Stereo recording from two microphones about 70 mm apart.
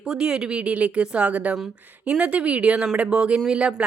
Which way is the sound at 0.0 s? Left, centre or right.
Centre.